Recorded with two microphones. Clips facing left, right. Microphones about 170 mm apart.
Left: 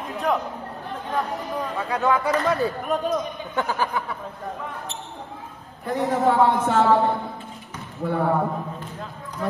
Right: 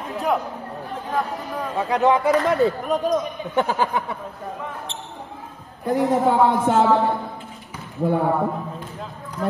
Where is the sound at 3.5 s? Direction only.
20° right (ahead or behind).